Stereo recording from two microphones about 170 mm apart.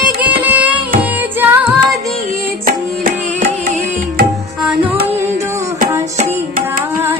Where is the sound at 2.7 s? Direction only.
55° right (ahead or behind).